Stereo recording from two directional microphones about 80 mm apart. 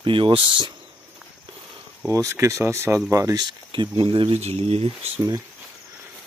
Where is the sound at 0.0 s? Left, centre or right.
Right.